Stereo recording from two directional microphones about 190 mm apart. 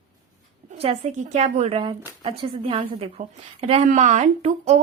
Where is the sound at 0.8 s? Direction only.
35° right (ahead or behind).